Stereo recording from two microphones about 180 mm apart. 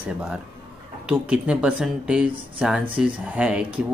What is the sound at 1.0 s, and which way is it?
Speech, 10° right (ahead or behind).